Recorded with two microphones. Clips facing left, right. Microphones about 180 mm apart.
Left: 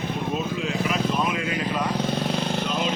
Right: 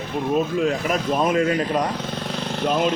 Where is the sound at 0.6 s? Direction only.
45° right (ahead or behind).